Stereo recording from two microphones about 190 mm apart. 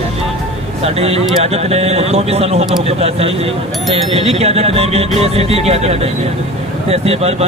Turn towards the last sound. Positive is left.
turn(degrees=-30)  # may be behind; listen again after turning